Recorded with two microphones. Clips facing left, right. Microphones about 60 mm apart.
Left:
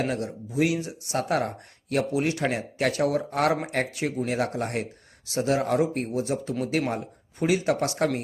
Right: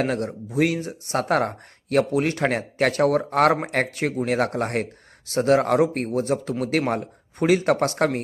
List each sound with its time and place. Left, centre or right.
0.0 s speech: right